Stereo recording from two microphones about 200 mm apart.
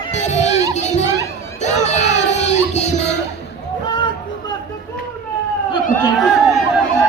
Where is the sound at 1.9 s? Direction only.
35° left (ahead or behind).